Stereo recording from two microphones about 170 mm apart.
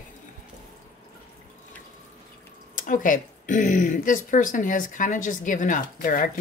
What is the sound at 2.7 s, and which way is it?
Speech, 50° left (ahead or behind).